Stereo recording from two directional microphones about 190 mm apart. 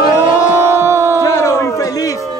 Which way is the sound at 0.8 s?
15° right (ahead or behind).